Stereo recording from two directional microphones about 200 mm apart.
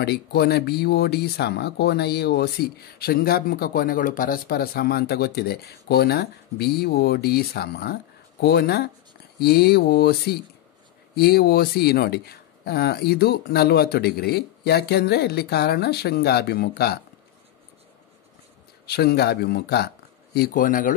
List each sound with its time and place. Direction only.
0.0 s speech: 50° left (ahead or behind)
18.9 s speech: 55° left (ahead or behind)